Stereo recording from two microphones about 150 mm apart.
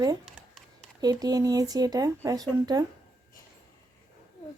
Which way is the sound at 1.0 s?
25° right (ahead or behind).